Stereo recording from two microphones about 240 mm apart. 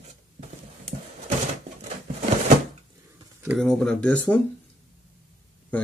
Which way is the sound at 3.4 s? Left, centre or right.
Centre.